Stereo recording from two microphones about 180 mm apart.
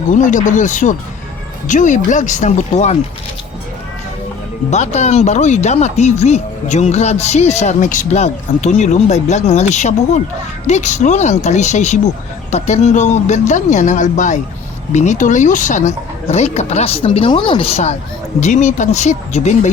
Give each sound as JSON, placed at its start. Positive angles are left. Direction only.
{"t": 0.1, "sound": "speech", "side_deg": 45}
{"t": 4.7, "sound": "speech", "side_deg": 40}